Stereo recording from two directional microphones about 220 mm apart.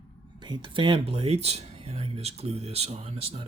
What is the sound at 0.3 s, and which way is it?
Speech, 20° right (ahead or behind).